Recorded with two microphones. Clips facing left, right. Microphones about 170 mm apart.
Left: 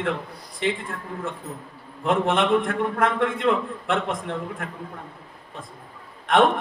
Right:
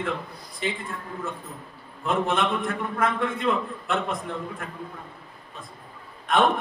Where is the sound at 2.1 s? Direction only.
70° left (ahead or behind).